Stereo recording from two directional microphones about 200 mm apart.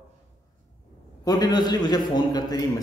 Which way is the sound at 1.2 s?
20° left (ahead or behind).